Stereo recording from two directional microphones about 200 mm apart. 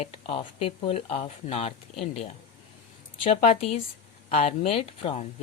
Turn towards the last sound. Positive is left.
turn(degrees=30)  # may be behind; listen again after turning